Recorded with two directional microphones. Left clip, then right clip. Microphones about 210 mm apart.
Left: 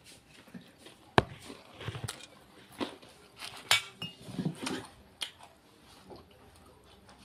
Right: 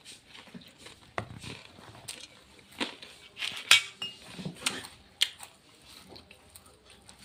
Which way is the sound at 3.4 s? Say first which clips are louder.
Right 6 dB; 20° left (ahead or behind).